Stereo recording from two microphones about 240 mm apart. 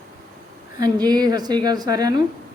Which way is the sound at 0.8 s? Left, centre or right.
Centre.